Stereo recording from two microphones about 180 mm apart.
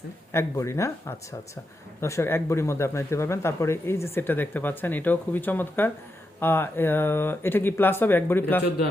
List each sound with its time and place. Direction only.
0.3 s a man's voice: 15° left (ahead or behind)